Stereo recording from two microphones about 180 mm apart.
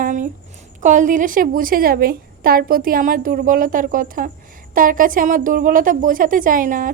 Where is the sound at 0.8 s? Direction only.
45° right (ahead or behind).